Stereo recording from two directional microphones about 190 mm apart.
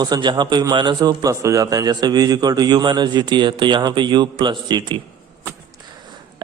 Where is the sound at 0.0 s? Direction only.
20° right (ahead or behind).